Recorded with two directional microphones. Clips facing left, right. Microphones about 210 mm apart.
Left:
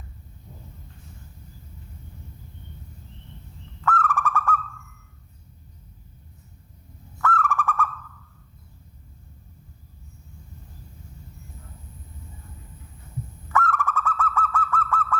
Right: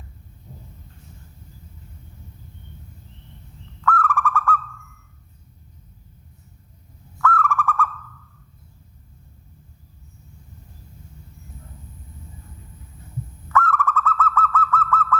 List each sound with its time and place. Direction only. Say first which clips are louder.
3.8 s owl: right 2 dB; 20° left (ahead or behind)
7.2 s owl: right 3 dB; 20° left (ahead or behind)
13.5 s owl: right 3 dB; 15° left (ahead or behind)